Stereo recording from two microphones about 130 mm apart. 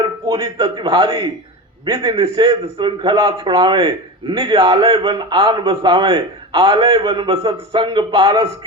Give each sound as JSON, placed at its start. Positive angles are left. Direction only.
{"t": 0.3, "sound": "a man's voice", "side_deg": -30}
{"t": 4.9, "sound": "a man's voice", "side_deg": -40}